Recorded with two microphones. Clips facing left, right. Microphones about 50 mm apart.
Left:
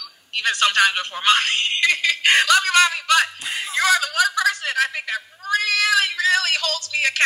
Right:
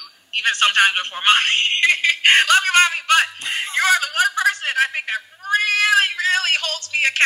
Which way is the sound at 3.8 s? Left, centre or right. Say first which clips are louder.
Right 1 dB; right.